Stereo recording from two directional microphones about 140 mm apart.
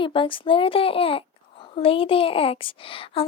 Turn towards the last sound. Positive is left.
turn(degrees=40)  # may be behind; listen again after turning